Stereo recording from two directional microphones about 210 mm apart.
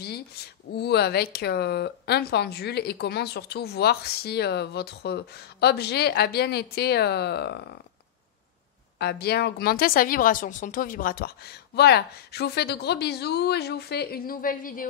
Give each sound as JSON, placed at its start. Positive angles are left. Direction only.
{"t": 0.7, "sound": "speech", "side_deg": 50}
{"t": 8.9, "sound": "speech", "side_deg": 50}